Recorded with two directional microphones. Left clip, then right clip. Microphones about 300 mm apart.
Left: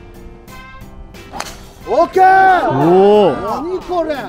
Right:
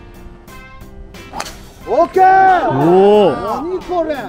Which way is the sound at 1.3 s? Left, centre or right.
Centre.